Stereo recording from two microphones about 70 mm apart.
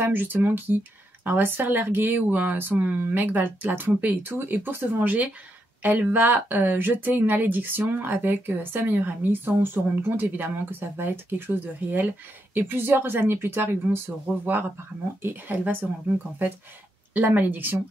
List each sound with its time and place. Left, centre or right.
0.0 s speech: right
17.1 s speech: right